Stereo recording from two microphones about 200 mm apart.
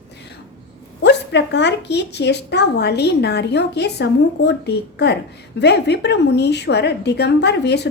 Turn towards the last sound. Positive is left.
turn(degrees=55)  # may be behind; listen again after turning